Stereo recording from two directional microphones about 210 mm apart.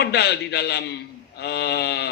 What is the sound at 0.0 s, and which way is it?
A man's voice, 50° left (ahead or behind).